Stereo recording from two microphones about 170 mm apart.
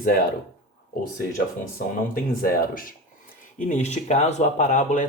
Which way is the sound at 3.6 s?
45° left (ahead or behind).